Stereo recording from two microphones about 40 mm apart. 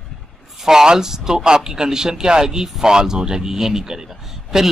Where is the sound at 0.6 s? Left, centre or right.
Centre.